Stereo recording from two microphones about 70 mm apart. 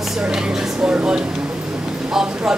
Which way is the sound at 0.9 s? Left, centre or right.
Centre.